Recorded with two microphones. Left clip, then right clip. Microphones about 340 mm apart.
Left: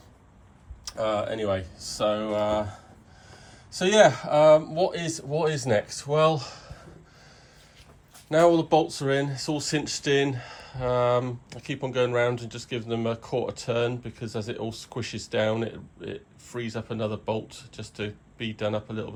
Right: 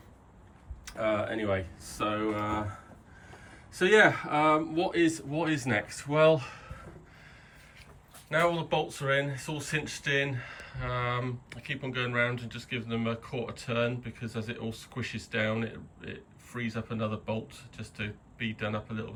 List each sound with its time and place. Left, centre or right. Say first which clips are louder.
0.9 s speech: left 3 dB; centre
3.8 s speech: left 3 dB; centre
8.3 s speech: left 8 dB; centre